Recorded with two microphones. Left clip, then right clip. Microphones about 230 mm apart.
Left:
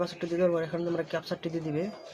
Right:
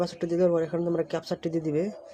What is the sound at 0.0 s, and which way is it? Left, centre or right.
Speech, right.